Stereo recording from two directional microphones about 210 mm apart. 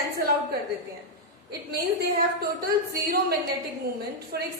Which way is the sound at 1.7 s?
45° right (ahead or behind).